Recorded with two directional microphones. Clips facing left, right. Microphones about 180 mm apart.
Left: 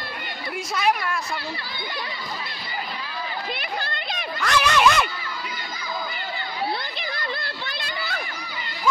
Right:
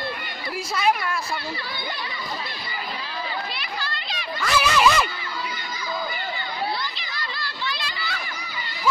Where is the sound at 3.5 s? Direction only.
55° left (ahead or behind).